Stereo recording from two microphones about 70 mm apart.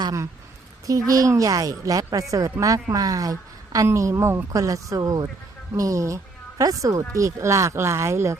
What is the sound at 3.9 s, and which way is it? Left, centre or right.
Speech, right.